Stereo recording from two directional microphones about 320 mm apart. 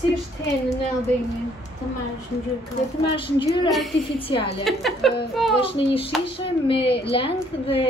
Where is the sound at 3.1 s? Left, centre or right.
Centre.